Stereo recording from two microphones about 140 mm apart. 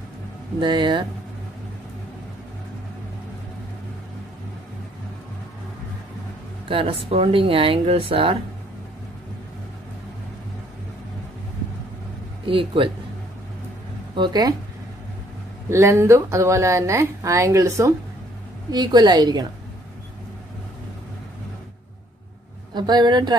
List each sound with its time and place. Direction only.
0.6 s speech: 35° right (ahead or behind)
6.7 s speech: 40° right (ahead or behind)
12.4 s speech: 40° right (ahead or behind)
14.1 s speech: 30° right (ahead or behind)
15.7 s speech: 20° right (ahead or behind)
22.8 s speech: 30° right (ahead or behind)